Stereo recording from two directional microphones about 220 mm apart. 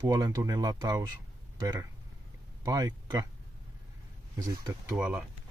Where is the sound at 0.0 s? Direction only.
15° right (ahead or behind).